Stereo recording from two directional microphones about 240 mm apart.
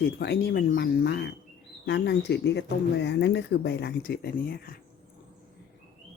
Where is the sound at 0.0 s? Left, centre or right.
Left.